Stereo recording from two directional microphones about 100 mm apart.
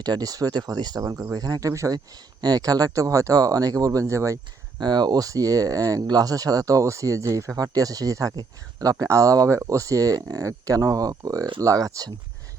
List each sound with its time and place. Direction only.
0.0 s speech: 40° right (ahead or behind)
4.8 s speech: 45° right (ahead or behind)